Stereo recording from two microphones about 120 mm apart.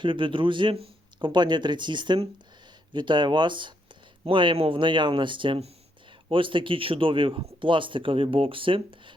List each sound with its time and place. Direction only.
0.0 s speech: 45° right (ahead or behind)